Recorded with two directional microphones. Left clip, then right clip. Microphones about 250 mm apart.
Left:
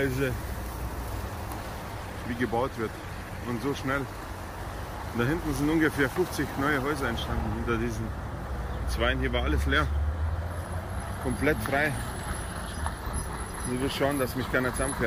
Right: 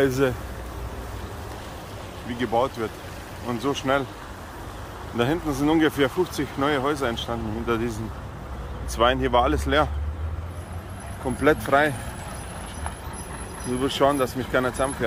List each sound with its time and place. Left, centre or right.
0.0 s speech: centre
2.4 s speech: centre
5.2 s speech: centre
8.9 s speech: centre
11.4 s speech: centre
13.7 s speech: centre